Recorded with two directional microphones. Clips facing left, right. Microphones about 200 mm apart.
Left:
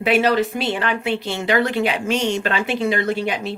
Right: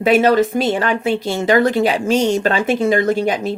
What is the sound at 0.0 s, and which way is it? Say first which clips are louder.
Speech: right 5 dB; 45° right (ahead or behind).